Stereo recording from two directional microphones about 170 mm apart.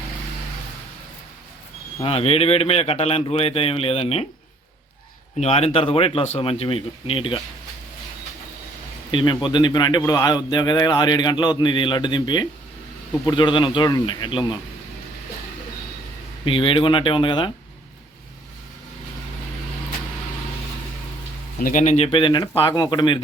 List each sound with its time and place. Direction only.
2.0 s speech: 35° left (ahead or behind)
5.4 s speech: 40° left (ahead or behind)
9.1 s a man's voice: 30° left (ahead or behind)
16.5 s a man's voice: 30° left (ahead or behind)
21.6 s speech: 50° left (ahead or behind); by 23.2 s 25° left (ahead or behind)